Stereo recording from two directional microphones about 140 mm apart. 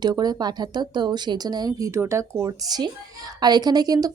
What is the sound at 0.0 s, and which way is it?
A woman's voice, 30° right (ahead or behind).